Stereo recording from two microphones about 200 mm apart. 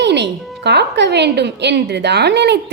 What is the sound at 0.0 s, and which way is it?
A woman's voice, 60° right (ahead or behind).